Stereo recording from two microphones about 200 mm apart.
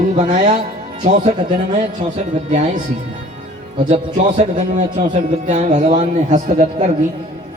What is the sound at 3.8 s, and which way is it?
Speech, 35° right (ahead or behind).